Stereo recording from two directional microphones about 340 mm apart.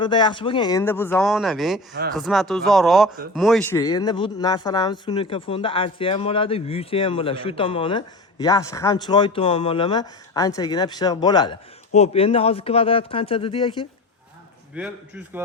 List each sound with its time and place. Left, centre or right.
0.0 s speech: centre
14.8 s speech: centre